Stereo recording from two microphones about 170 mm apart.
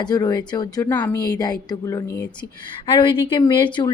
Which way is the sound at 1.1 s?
25° left (ahead or behind).